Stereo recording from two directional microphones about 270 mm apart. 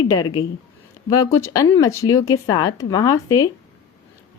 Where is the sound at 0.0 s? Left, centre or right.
Centre.